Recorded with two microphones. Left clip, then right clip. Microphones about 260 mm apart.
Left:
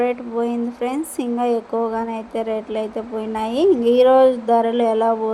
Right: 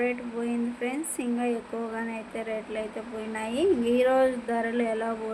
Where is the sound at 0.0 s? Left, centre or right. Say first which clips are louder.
Left 9 dB; left.